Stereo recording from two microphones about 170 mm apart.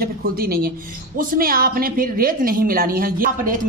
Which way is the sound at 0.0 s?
60° right (ahead or behind).